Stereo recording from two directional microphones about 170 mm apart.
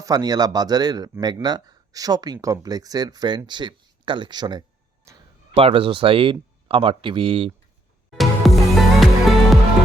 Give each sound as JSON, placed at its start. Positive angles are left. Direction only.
{"t": 0.0, "sound": "speech", "side_deg": -25}
{"t": 5.1, "sound": "a sound", "side_deg": -20}
{"t": 5.5, "sound": "speech", "side_deg": -30}
{"t": 8.2, "sound": "music", "side_deg": 0}